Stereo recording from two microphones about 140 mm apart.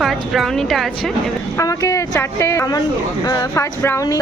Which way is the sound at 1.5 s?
25° left (ahead or behind).